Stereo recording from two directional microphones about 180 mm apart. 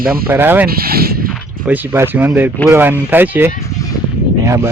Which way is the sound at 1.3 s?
10° right (ahead or behind).